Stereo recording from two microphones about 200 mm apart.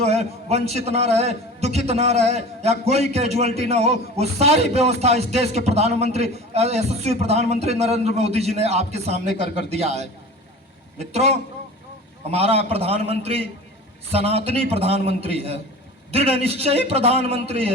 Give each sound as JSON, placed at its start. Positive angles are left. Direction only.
{"t": 0.0, "sound": "a man's voice", "side_deg": -35}